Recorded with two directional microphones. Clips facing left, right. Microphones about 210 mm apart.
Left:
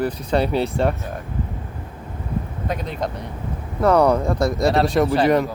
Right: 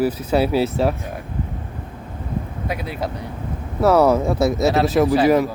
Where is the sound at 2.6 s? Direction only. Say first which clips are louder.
Left 1 dB; 5° right (ahead or behind).